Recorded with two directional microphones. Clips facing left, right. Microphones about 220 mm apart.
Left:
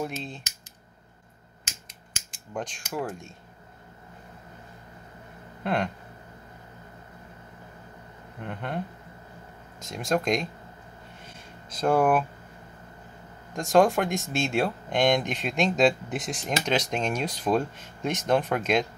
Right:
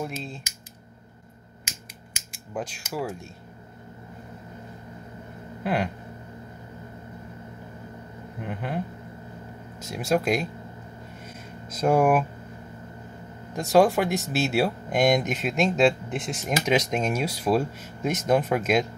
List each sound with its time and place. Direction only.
0.0 s speech: centre (ahead or behind)
2.1 s speech: 5° right (ahead or behind)
5.6 s a sound: 5° right (ahead or behind)
8.4 s speech: 5° right (ahead or behind)
9.8 s speech: 5° right (ahead or behind)
11.7 s speech: 10° right (ahead or behind)
13.6 s speech: 5° right (ahead or behind)